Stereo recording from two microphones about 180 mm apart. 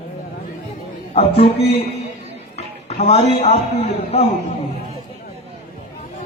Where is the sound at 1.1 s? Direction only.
35° left (ahead or behind).